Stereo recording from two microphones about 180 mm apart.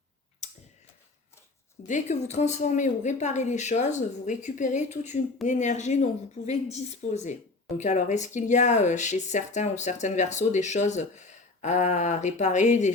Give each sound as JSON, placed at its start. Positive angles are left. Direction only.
{"t": 1.9, "sound": "speech", "side_deg": 40}